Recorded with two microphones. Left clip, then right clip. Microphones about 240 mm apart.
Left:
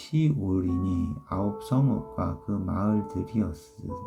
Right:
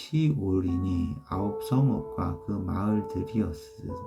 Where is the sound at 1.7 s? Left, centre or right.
Centre.